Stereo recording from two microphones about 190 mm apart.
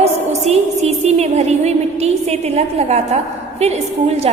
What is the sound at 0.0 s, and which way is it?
Music, 35° right (ahead or behind).